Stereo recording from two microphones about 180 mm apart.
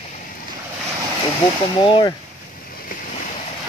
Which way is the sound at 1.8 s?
25° left (ahead or behind).